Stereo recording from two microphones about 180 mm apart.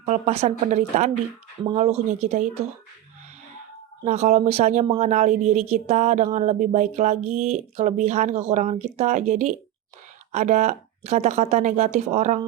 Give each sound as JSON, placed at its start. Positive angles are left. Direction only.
{"t": 0.0, "sound": "a woman's voice", "side_deg": -35}
{"t": 4.0, "sound": "a woman's voice", "side_deg": -40}